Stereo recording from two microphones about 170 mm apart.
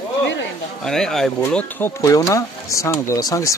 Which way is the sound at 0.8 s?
5° left (ahead or behind).